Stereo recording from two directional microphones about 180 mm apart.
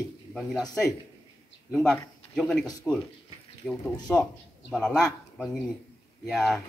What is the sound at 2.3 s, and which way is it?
A man's voice, 5° left (ahead or behind).